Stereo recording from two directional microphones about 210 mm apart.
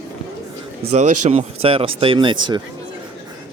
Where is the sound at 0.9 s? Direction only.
35° right (ahead or behind).